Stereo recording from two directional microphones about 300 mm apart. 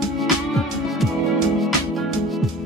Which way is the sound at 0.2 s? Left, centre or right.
Centre.